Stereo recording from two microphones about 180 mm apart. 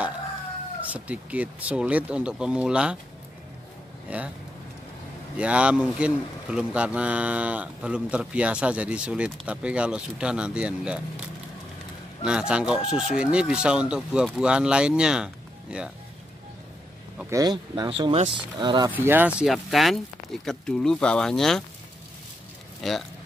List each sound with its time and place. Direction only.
0.9 s speech: 10° right (ahead or behind)
4.1 s speech: 5° right (ahead or behind)
5.4 s speech: 5° right (ahead or behind)
12.2 s speech: 5° right (ahead or behind)
17.3 s speech: 20° right (ahead or behind)
18.9 s speech: 10° right (ahead or behind)
22.8 s speech: centre (ahead or behind)